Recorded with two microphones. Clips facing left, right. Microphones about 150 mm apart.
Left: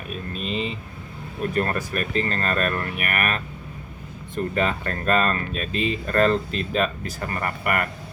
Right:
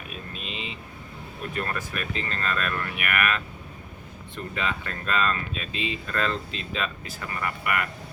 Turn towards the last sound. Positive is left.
turn(degrees=45)  # may be behind; listen again after turning